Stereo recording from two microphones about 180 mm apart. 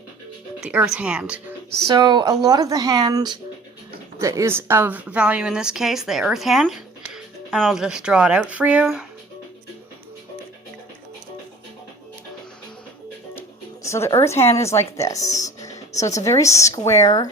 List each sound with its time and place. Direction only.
0.6 s speech: 5° right (ahead or behind)
1.9 s a woman's voice: 25° right (ahead or behind); by 9.0 s 5° right (ahead or behind)
13.8 s a woman's voice: 15° left (ahead or behind)
15.4 s music: 20° left (ahead or behind)
16.0 s a woman's voice: 20° left (ahead or behind)